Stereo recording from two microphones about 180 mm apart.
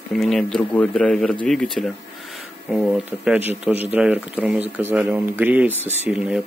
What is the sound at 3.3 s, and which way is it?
Speech, 10° right (ahead or behind).